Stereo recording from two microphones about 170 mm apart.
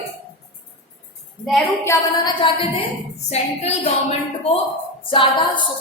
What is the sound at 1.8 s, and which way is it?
Speech, 20° left (ahead or behind).